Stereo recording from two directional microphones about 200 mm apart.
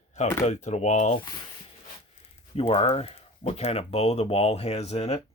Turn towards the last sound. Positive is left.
turn(degrees=30)  # may be behind; listen again after turning